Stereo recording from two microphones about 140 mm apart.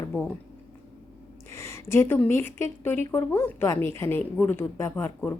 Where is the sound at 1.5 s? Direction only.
20° left (ahead or behind).